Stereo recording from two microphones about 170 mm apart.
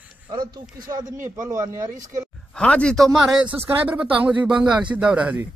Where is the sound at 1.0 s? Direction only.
50° right (ahead or behind).